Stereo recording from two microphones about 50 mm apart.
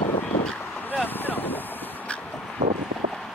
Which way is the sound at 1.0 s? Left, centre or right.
Left.